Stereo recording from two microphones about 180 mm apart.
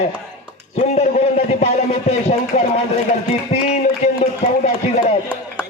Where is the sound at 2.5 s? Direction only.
45° left (ahead or behind).